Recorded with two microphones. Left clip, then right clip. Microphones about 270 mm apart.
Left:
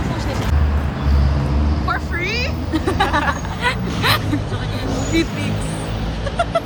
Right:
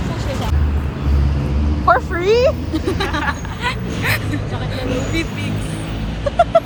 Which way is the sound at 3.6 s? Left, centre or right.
Left.